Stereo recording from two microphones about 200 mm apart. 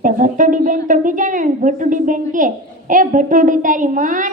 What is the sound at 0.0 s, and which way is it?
A woman's voice, 40° right (ahead or behind).